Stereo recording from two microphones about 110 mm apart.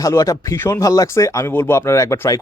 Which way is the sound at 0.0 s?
30° left (ahead or behind).